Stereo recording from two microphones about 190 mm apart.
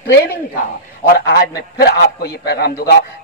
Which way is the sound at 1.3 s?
60° left (ahead or behind).